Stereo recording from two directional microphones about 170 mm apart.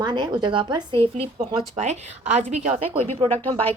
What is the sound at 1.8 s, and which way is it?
A woman's voice, 40° right (ahead or behind).